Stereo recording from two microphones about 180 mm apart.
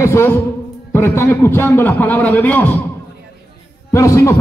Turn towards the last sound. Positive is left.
turn(degrees=15)  # may be behind; listen again after turning